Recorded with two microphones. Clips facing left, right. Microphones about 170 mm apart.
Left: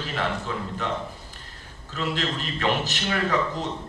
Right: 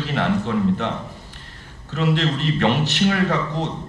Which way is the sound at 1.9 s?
65° right (ahead or behind).